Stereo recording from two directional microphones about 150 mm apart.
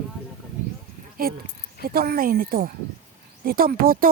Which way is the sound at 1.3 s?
85° right.